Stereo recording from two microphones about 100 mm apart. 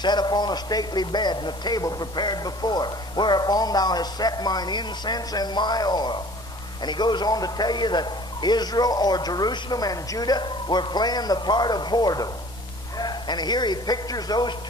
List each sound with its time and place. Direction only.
0.0 s a man's voice: 45° left (ahead or behind)